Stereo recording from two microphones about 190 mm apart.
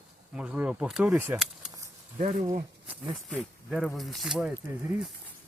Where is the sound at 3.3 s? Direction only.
5° left (ahead or behind).